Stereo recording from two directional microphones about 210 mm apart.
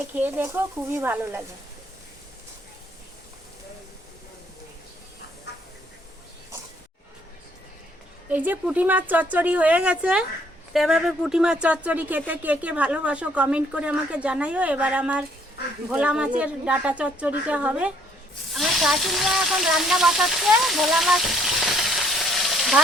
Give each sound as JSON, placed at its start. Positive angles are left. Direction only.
{"t": 0.1, "sound": "speech", "side_deg": -10}
{"t": 5.5, "sound": "a sound", "side_deg": 55}
{"t": 8.3, "sound": "speech", "side_deg": -10}